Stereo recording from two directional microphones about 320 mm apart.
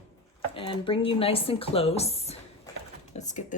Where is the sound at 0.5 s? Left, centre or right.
Centre.